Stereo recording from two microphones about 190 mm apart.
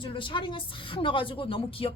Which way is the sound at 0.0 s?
25° left (ahead or behind).